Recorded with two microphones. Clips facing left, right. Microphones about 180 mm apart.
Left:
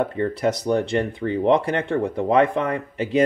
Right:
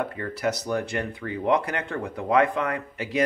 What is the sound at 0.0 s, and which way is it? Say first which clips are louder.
Speech: left 6 dB; 25° left (ahead or behind).